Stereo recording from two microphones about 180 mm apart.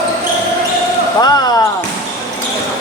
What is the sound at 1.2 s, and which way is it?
Speech, 20° left (ahead or behind).